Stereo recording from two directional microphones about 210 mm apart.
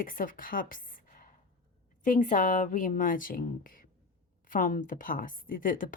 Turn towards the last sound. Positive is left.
turn(degrees=40)  # may be behind; listen again after turning